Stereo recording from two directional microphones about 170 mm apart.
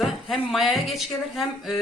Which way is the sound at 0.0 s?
Centre (ahead or behind).